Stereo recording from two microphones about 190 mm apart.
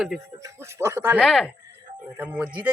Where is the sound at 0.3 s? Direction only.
15° right (ahead or behind).